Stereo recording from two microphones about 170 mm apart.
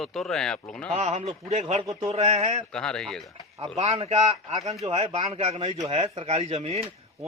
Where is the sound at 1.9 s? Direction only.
20° right (ahead or behind).